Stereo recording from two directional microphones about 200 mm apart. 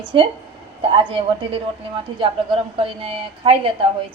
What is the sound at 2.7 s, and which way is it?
Speech, 25° right (ahead or behind).